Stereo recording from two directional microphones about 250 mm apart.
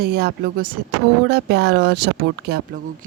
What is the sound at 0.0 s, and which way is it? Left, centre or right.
A woman's voice, right.